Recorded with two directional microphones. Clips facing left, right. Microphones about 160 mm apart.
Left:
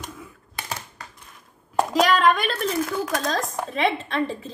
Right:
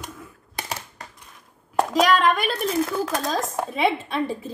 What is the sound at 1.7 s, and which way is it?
A child's voice, centre (ahead or behind).